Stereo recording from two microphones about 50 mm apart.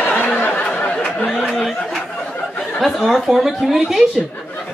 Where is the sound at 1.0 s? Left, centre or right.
Left.